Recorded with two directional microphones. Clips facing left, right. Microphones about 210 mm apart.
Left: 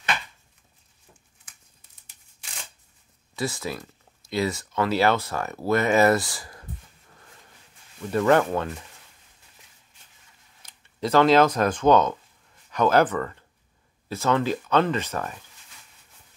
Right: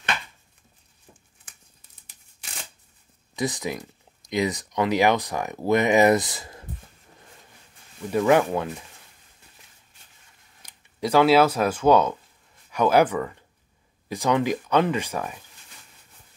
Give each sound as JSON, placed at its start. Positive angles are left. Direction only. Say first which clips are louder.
{"t": 3.3, "sound": "speech", "louder": "right 2 dB", "side_deg": -15}
{"t": 8.1, "sound": "speech", "louder": "right 1 dB", "side_deg": -10}
{"t": 10.6, "sound": "speech", "louder": "right 1 dB", "side_deg": -10}